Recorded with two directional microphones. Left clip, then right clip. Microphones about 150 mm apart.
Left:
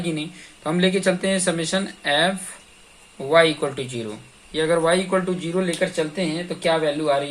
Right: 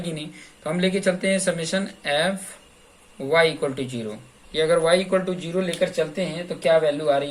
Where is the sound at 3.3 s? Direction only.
45° left (ahead or behind).